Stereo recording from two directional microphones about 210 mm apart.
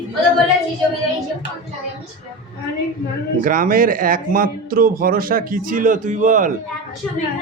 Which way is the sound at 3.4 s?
40° right (ahead or behind).